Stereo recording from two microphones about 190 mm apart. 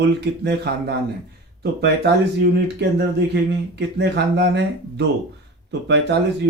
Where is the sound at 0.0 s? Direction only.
60° right (ahead or behind).